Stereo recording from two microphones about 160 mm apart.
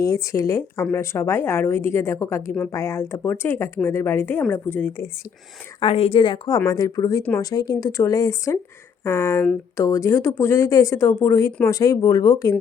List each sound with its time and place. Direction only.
0.0 s a woman's voice: 20° left (ahead or behind)
5.8 s speech: 35° left (ahead or behind)
7.2 s a woman's voice: 10° left (ahead or behind)
7.5 s a woman's voice: 25° left (ahead or behind)